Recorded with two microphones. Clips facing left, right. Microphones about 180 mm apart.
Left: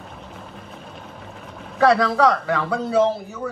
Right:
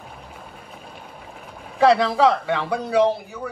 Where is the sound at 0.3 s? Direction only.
5° right (ahead or behind).